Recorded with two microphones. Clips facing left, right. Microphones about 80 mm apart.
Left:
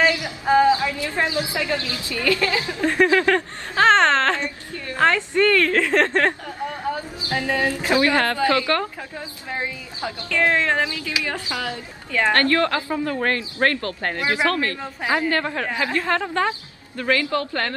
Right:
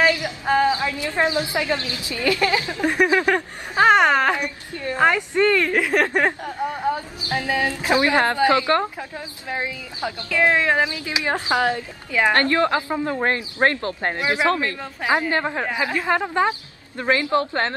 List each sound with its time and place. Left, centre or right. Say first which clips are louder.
0.7 s a woman's voice: left 3 dB; right
6.6 s a sound: right 3 dB; right
7.0 s a woman's voice: even; right
10.0 s a woman's voice: right 1 dB; centre
10.9 s a woman's voice: right 3 dB; right
12.1 s a woman's voice: even; centre